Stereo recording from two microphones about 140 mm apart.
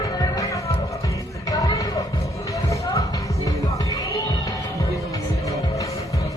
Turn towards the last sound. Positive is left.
turn(degrees=25)  # may be behind; listen again after turning